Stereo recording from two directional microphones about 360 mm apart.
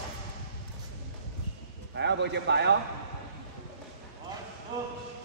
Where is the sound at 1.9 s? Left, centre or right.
Right.